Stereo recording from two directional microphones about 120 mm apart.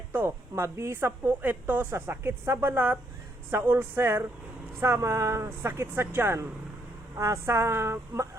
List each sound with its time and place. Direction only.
0.1 s a woman's voice: 20° right (ahead or behind)